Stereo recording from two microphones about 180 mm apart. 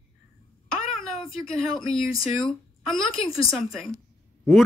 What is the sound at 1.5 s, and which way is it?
A man's voice, 5° left (ahead or behind).